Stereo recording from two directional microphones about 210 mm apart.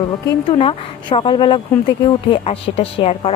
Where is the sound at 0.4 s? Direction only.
25° left (ahead or behind).